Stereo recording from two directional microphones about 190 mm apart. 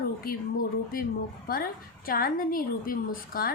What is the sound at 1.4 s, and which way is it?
A woman's voice, 50° left (ahead or behind).